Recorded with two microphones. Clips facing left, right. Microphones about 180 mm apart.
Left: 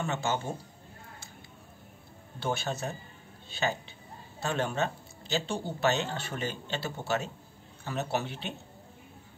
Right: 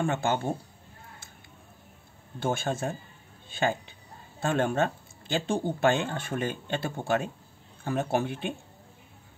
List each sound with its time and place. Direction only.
0.0 s speech: 55° right (ahead or behind)
2.4 s speech: 50° right (ahead or behind)